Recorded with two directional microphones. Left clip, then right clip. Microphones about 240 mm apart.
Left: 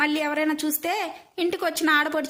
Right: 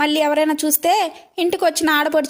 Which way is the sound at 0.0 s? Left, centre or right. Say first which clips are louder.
Right 7 dB; right.